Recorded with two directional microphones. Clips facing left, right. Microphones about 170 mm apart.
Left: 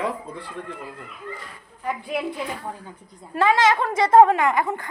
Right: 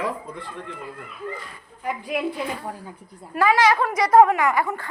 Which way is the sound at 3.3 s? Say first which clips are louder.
Even; 25° left (ahead or behind).